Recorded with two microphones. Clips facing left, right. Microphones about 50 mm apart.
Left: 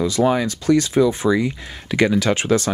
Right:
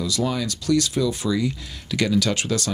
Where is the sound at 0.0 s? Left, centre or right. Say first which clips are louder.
Left 7 dB; left.